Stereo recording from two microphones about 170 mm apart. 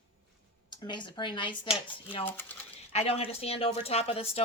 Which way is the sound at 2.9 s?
35° left (ahead or behind).